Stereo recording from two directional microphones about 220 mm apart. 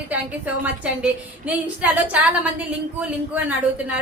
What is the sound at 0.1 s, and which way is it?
Speech, 5° right (ahead or behind).